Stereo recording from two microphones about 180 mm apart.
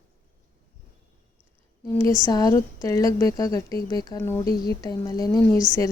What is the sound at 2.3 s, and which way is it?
A woman's voice, 20° left (ahead or behind).